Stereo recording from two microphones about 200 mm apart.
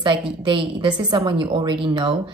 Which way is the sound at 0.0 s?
25° right (ahead or behind).